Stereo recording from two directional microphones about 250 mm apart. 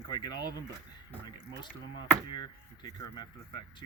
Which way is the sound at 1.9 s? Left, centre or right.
Centre.